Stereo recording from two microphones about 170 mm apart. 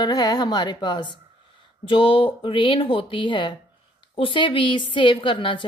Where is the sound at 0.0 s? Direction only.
25° left (ahead or behind).